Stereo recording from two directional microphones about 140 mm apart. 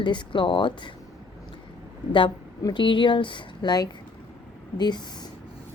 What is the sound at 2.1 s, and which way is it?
Speech, 35° left (ahead or behind).